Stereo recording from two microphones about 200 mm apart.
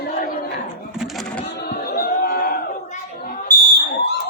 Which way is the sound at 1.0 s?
Centre (ahead or behind).